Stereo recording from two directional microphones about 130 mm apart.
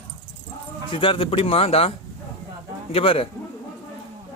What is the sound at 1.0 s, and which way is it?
Speech, 40° left (ahead or behind).